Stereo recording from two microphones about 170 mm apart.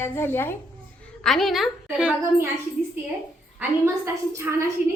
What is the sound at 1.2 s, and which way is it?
Speech, centre (ahead or behind).